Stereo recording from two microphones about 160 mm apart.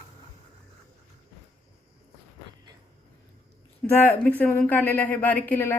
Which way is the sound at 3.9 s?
10° left (ahead or behind).